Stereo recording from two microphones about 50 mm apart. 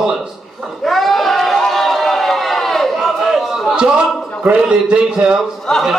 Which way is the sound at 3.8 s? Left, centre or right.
Centre.